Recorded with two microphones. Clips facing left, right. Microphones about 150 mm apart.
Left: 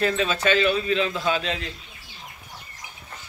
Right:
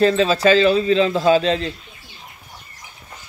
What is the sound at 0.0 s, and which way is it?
A man's voice, 30° right (ahead or behind).